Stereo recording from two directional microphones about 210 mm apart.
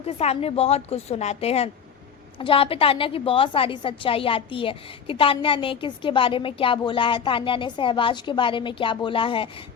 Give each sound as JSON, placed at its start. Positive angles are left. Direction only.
{"t": 0.0, "sound": "a woman's voice", "side_deg": 30}